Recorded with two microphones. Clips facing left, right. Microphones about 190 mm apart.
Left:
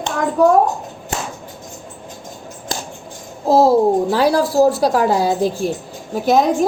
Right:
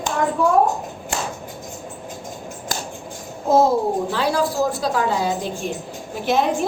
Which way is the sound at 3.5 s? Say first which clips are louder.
Left 4 dB; 35° left (ahead or behind).